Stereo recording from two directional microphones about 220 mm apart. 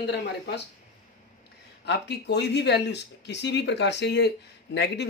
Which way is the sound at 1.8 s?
50° left (ahead or behind).